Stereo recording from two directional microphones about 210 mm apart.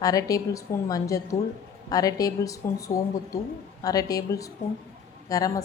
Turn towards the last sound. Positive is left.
turn(degrees=15)  # may be behind; listen again after turning